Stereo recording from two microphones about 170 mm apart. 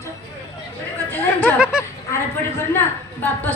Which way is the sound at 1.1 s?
10° left (ahead or behind).